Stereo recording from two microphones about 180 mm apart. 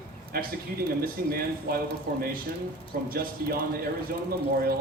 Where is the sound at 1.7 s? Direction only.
60° right (ahead or behind).